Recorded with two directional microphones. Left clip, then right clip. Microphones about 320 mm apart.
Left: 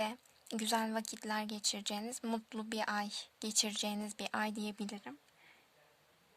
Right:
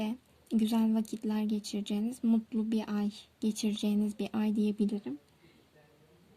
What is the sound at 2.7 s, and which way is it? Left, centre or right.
Speech, left.